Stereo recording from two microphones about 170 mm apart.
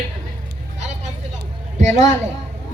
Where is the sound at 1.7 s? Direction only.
45° right (ahead or behind).